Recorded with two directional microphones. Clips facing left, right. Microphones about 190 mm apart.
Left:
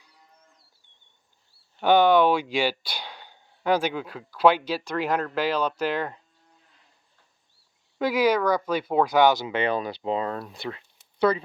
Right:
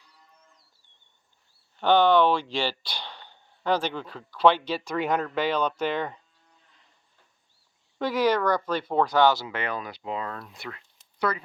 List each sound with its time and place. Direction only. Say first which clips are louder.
1.8 s speech: left 1 dB; 10° left (ahead or behind)
7.9 s speech: left 2 dB; 5° left (ahead or behind); by 11.4 s 25° left (ahead or behind)